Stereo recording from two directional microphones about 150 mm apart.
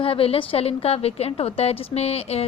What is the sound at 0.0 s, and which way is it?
A woman's voice, 40° left (ahead or behind).